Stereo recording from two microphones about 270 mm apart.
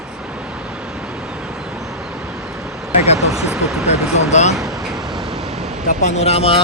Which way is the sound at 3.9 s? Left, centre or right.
Left.